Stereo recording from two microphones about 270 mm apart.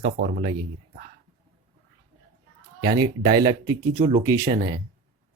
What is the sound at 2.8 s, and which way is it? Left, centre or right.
Speech, centre.